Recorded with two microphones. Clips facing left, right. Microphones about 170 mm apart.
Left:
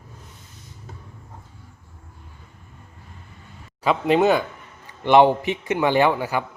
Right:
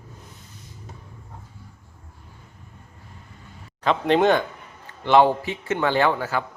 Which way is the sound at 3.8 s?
5° left (ahead or behind).